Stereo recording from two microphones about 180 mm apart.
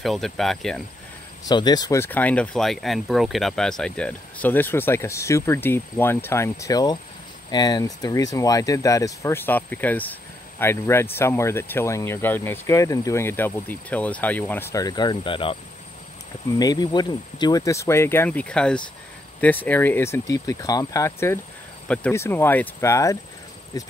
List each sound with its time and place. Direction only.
0.0 s speech: centre (ahead or behind)
1.5 s speech: 20° left (ahead or behind)